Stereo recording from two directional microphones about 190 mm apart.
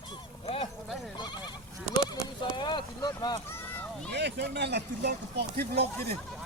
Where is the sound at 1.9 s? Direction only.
20° left (ahead or behind).